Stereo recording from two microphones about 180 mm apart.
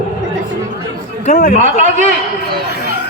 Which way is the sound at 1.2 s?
40° left (ahead or behind).